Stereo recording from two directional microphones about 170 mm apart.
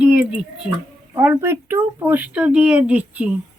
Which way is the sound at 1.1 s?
15° right (ahead or behind).